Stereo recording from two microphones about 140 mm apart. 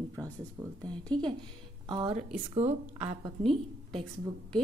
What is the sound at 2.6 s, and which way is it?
Speech, 50° right (ahead or behind).